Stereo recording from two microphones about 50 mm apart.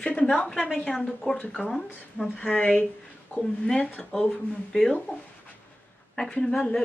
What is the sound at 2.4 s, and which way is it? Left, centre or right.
Speech, left.